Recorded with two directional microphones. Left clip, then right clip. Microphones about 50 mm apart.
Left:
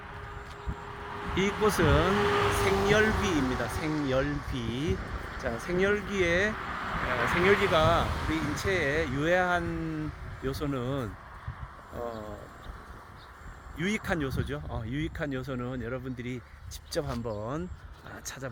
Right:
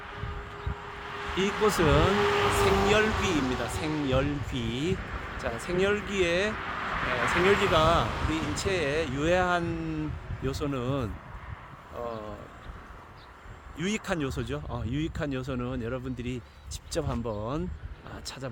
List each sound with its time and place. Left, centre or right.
0.0 s a sound: centre
1.8 s speech: left
2.1 s vehicle: centre
2.6 s speech: centre
4.9 s vehicle: centre
5.4 s speech: centre
10.4 s speech: centre
13.7 s speech: centre